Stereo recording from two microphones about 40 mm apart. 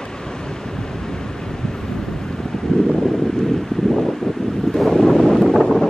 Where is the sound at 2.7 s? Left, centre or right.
Left.